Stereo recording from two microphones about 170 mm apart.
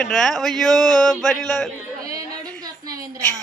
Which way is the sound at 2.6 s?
25° right (ahead or behind).